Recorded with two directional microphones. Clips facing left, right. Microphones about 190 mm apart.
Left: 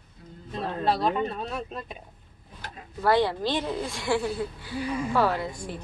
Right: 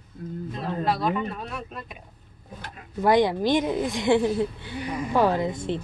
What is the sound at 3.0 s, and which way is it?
A woman's voice, 15° right (ahead or behind).